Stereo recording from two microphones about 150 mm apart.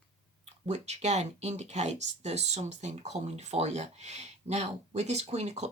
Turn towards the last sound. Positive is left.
turn(degrees=-50)  # may be behind; listen again after turning